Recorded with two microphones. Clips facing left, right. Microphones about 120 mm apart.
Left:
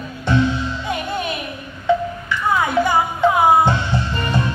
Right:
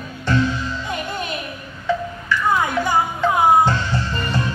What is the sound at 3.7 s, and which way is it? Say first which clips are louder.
Music: left 2 dB; 15° left (ahead or behind).